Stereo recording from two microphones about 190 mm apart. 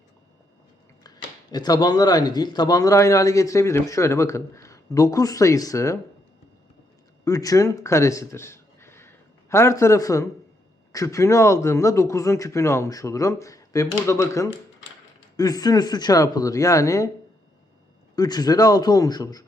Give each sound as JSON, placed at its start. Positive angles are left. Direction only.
{"t": 1.0, "sound": "speech", "side_deg": 20}
{"t": 7.3, "sound": "speech", "side_deg": 20}
{"t": 18.2, "sound": "speech", "side_deg": 20}